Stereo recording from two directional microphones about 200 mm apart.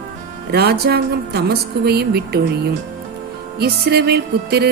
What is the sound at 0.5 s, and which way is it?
Music, 50° right (ahead or behind).